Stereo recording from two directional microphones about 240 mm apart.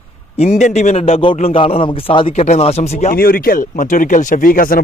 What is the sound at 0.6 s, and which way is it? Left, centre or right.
Speech, left.